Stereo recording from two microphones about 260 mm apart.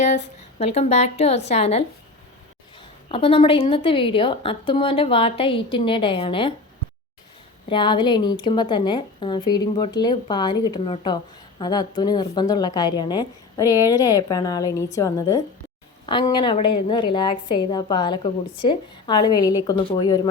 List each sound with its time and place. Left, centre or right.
0.6 s a woman's voice: left
3.1 s a woman's voice: left
7.7 s a woman's voice: centre